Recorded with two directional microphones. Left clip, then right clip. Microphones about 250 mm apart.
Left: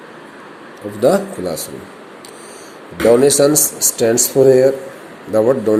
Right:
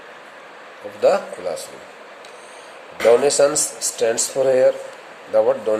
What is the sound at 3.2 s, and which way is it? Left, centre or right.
Speech, centre.